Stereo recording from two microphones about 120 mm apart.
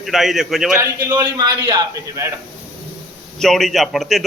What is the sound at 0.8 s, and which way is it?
A man's voice, 35° right (ahead or behind).